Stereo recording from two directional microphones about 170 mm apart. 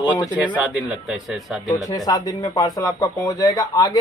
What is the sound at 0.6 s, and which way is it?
A man's voice, 10° right (ahead or behind).